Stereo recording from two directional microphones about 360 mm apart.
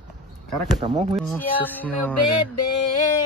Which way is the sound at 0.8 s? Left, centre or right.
Centre.